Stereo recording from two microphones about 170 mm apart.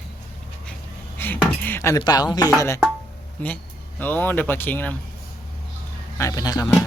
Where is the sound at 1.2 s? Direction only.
10° left (ahead or behind).